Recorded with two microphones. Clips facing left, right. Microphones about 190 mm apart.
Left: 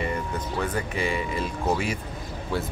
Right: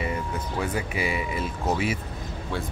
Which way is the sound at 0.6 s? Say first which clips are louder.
Even; 10° right (ahead or behind).